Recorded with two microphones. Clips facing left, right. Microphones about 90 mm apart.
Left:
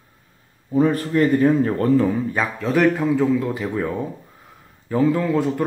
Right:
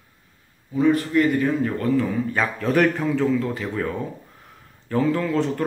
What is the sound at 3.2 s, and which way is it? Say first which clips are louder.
Speech: left 2 dB; 15° left (ahead or behind).